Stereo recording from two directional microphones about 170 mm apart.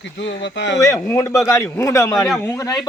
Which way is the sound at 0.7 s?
20° left (ahead or behind).